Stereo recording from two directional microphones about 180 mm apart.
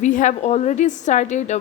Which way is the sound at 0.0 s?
45° left (ahead or behind).